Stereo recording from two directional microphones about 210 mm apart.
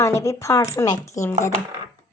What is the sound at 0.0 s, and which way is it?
Speech, 15° left (ahead or behind).